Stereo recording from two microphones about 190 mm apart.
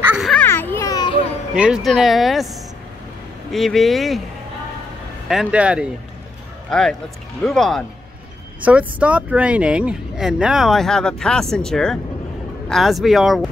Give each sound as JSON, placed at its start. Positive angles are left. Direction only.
{"t": 0.1, "sound": "children playing", "side_deg": 0}
{"t": 0.4, "sound": "music", "side_deg": 10}
{"t": 1.5, "sound": "speech", "side_deg": 0}
{"t": 3.5, "sound": "speech", "side_deg": 0}
{"t": 5.3, "sound": "speech", "side_deg": -5}